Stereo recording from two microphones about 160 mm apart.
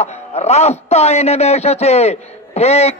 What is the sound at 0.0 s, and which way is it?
A man's voice, 45° left (ahead or behind).